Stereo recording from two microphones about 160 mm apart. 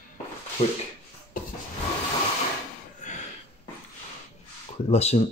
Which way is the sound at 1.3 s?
60° left (ahead or behind).